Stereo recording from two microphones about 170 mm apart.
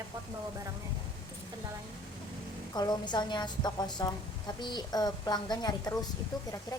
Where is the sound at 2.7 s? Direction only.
25° left (ahead or behind).